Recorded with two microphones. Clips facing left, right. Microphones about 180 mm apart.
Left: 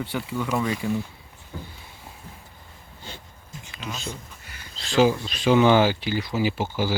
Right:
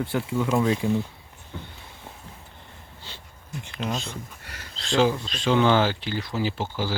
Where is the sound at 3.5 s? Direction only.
60° right (ahead or behind).